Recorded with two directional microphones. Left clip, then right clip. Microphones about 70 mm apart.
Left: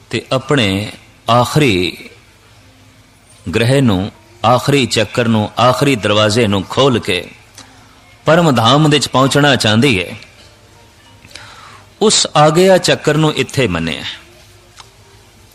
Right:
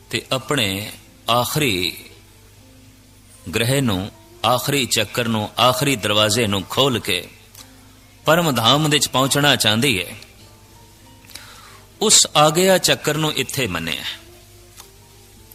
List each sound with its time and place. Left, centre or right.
0.1 s a man's voice: right
3.4 s a man's voice: right
11.3 s a man's voice: right